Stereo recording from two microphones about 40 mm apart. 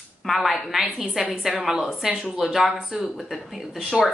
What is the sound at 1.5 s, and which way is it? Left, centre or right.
A woman's voice, centre.